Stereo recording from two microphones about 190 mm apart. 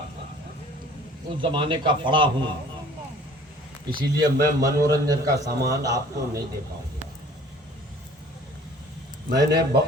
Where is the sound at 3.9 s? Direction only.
20° right (ahead or behind).